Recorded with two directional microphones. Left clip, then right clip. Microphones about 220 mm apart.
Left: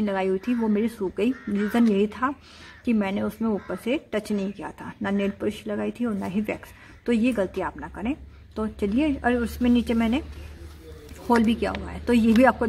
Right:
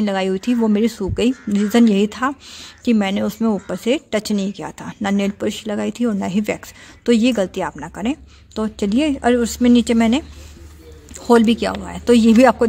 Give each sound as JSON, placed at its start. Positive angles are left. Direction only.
{"t": 0.0, "sound": "speech", "side_deg": -40}
{"t": 11.2, "sound": "speech", "side_deg": -45}